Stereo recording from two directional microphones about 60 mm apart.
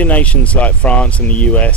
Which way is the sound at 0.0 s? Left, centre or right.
Left.